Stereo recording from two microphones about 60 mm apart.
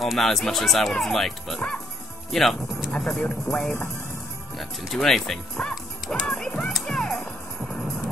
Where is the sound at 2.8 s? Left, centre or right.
Centre.